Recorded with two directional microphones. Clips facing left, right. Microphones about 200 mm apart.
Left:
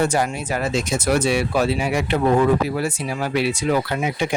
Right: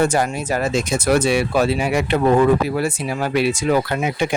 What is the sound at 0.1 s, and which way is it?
Speech, 45° right (ahead or behind).